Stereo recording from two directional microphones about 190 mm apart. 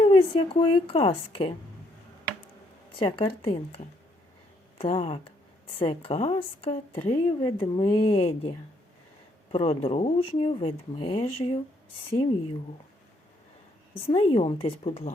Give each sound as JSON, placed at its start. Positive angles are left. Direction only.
{"t": 0.0, "sound": "speech", "side_deg": 30}
{"t": 3.0, "sound": "speech", "side_deg": 25}
{"t": 4.8, "sound": "speech", "side_deg": 30}
{"t": 14.1, "sound": "speech", "side_deg": 30}